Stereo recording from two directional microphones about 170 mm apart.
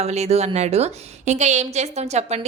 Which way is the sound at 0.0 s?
40° right (ahead or behind).